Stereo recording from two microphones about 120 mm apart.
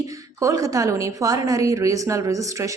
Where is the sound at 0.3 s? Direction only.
30° right (ahead or behind).